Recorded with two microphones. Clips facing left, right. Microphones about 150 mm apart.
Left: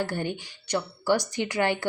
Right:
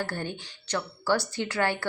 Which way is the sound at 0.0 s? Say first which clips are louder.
Left 4 dB; 15° left (ahead or behind).